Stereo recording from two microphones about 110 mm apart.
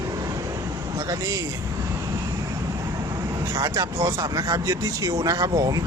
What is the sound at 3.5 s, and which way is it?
Speech, 35° right (ahead or behind).